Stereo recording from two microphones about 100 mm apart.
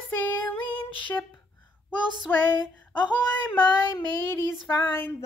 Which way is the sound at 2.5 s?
45° left (ahead or behind).